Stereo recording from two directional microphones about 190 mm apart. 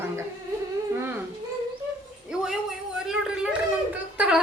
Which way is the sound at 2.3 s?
5° right (ahead or behind).